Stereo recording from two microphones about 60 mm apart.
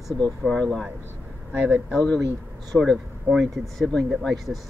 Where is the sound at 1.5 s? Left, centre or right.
Right.